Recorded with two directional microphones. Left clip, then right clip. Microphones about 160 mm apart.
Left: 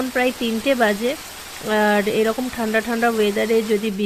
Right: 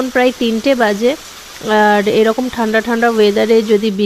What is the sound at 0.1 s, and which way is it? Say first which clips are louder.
Speech: right 8 dB; 35° right (ahead or behind).